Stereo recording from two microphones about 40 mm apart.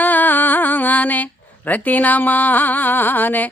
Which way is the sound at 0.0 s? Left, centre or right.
Left.